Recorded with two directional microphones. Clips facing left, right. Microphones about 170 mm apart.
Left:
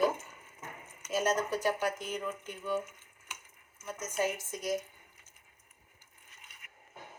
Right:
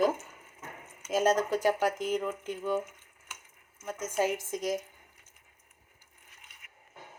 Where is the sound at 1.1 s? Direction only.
90° right.